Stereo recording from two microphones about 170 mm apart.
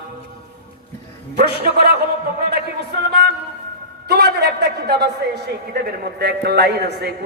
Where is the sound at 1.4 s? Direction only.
70° right (ahead or behind).